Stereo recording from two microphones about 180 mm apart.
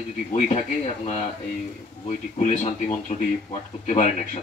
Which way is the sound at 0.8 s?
40° left (ahead or behind).